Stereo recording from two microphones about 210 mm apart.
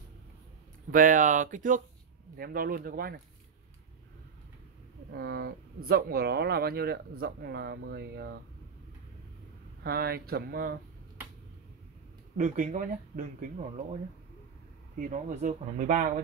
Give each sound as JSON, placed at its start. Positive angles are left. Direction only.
{"t": 0.9, "sound": "speech", "side_deg": -40}
{"t": 5.1, "sound": "speech", "side_deg": -50}
{"t": 9.8, "sound": "speech", "side_deg": -50}
{"t": 12.4, "sound": "speech", "side_deg": -35}
{"t": 15.0, "sound": "speech", "side_deg": -35}